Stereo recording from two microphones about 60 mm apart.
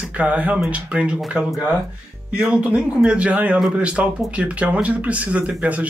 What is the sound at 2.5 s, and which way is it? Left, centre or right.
Speech, centre.